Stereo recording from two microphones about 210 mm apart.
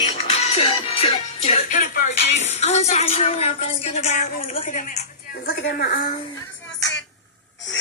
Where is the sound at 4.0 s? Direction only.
30° left (ahead or behind).